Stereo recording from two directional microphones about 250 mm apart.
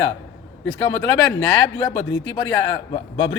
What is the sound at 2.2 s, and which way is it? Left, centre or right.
Speech, left.